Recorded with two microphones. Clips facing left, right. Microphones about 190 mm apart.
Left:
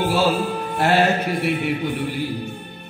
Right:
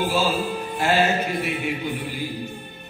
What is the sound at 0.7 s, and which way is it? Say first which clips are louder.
Music: left 3 dB; 65° left (ahead or behind).